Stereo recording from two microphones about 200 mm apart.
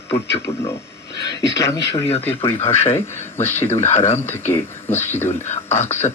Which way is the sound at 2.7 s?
30° left (ahead or behind).